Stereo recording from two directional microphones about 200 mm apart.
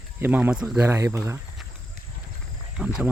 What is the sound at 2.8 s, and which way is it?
Speech, 5° right (ahead or behind).